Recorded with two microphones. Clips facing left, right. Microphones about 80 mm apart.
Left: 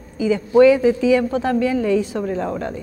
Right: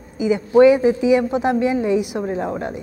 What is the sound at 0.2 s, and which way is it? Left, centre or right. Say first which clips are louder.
A woman's voice: even; right.